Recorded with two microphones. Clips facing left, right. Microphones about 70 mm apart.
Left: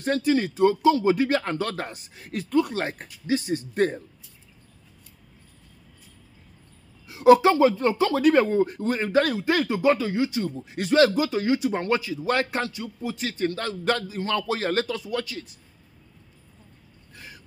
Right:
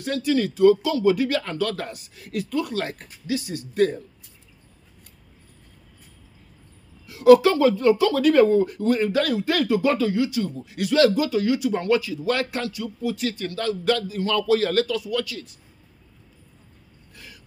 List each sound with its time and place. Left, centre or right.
0.0 s speech: left
7.1 s speech: left
17.1 s a sound: left